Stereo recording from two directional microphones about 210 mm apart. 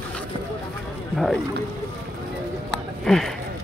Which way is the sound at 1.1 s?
Centre (ahead or behind).